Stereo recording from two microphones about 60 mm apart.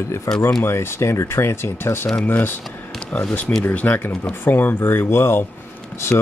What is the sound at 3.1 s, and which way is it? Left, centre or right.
Speech, left.